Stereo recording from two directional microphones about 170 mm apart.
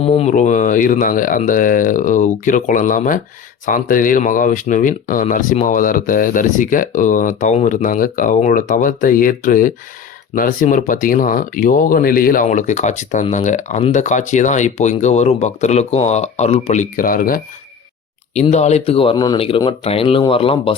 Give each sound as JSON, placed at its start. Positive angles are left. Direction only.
{"t": 0.0, "sound": "speech", "side_deg": 35}
{"t": 18.5, "sound": "speech", "side_deg": 40}